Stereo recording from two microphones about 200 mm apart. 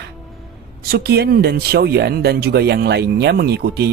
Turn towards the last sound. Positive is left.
turn(degrees=-55)  # may be behind; listen again after turning